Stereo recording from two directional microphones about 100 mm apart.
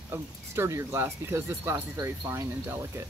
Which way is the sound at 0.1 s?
25° right (ahead or behind).